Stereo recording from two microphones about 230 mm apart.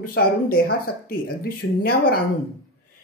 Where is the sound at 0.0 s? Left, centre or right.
Left.